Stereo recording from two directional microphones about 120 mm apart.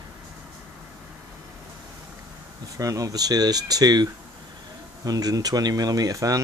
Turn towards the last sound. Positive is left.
turn(degrees=-30)  # may be behind; listen again after turning